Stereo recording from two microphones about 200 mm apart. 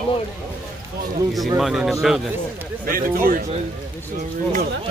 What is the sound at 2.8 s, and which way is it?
Speech, 45° right (ahead or behind).